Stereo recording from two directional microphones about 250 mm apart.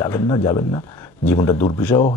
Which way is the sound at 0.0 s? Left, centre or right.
Centre.